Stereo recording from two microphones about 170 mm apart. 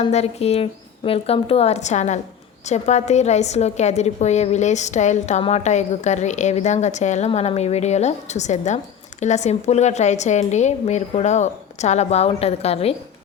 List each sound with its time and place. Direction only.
0.0 s a woman's voice: 40° left (ahead or behind)